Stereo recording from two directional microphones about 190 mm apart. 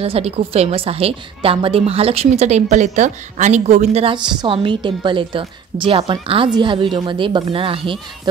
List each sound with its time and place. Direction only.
0.0 s a woman's voice: 30° right (ahead or behind)